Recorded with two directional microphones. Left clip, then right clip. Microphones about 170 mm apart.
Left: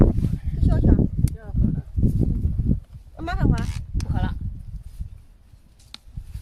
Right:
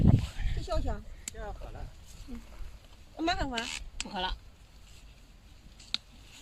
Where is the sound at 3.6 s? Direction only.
15° left (ahead or behind).